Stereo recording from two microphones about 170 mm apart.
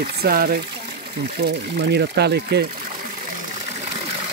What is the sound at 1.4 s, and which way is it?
Speech, 75° right (ahead or behind).